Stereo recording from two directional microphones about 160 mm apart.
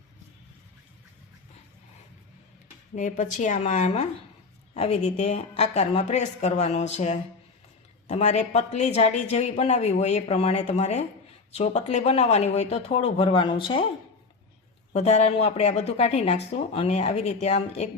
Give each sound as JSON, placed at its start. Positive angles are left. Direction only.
{"t": 2.9, "sound": "speech", "side_deg": 50}
{"t": 14.9, "sound": "speech", "side_deg": 45}